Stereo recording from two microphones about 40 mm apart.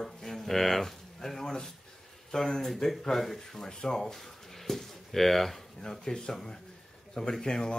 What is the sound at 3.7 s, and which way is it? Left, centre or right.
Speech, centre.